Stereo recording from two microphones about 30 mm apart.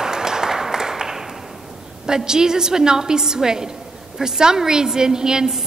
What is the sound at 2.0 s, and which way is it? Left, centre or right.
A woman's voice, right.